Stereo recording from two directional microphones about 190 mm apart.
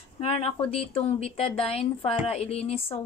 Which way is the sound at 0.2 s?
30° left (ahead or behind).